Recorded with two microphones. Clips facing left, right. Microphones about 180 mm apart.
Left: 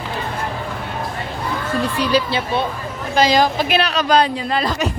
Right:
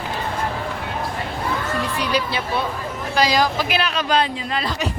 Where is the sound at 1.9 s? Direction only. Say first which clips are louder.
Left 6 dB; 30° left (ahead or behind).